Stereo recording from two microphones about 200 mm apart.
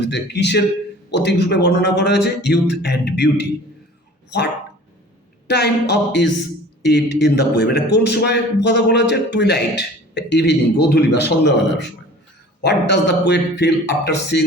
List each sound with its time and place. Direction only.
0.0 s a man's voice: 60° left (ahead or behind)
5.5 s a man's voice: 55° left (ahead or behind)